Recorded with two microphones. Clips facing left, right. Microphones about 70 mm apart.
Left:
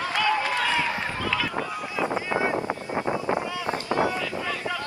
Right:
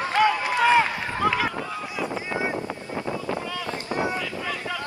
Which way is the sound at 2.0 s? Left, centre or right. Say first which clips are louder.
Left 3 dB; left.